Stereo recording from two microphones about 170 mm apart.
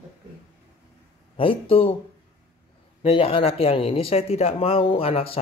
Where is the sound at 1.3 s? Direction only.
30° left (ahead or behind).